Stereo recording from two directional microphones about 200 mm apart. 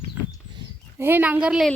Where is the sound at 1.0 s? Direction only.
10° right (ahead or behind).